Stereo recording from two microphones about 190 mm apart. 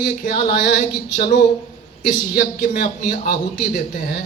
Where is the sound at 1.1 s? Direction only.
40° left (ahead or behind).